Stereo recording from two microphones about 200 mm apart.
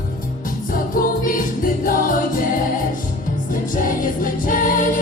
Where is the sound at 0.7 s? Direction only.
45° left (ahead or behind).